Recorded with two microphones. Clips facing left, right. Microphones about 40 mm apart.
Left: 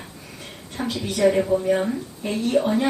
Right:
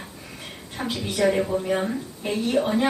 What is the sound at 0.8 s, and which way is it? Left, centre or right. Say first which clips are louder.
Speech: left 2 dB; centre.